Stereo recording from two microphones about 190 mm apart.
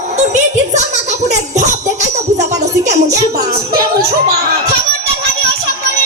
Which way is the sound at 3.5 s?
55° right (ahead or behind).